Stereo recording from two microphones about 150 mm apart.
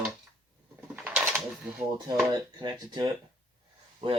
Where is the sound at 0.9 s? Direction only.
10° right (ahead or behind).